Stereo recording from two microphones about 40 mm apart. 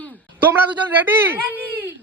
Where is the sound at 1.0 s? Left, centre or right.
Right.